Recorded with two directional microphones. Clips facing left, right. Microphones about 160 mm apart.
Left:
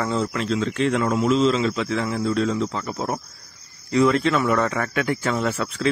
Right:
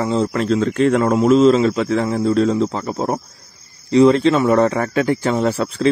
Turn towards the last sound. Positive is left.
turn(degrees=-35)  # may be behind; listen again after turning